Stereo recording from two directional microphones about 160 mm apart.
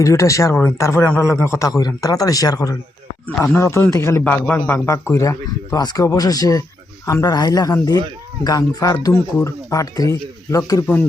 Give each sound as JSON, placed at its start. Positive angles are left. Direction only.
{"t": 0.0, "sound": "a man's voice", "side_deg": 20}